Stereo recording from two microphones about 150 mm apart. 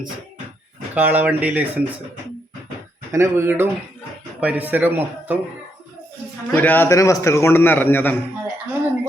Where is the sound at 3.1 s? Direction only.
15° right (ahead or behind).